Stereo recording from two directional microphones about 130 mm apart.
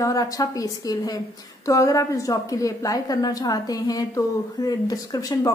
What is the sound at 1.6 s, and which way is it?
A woman's voice, 25° left (ahead or behind).